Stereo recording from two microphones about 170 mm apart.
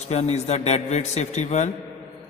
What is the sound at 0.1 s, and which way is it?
A man's voice, 40° left (ahead or behind).